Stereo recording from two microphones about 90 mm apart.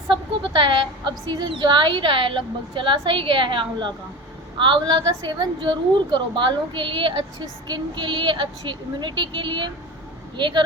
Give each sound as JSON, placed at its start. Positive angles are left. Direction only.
{"t": 0.1, "sound": "a woman's voice", "side_deg": -65}